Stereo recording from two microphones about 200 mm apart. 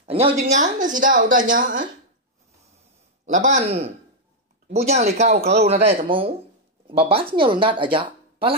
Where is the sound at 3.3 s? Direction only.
35° right (ahead or behind).